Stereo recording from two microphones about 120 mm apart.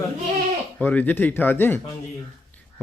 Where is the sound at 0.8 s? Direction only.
15° left (ahead or behind).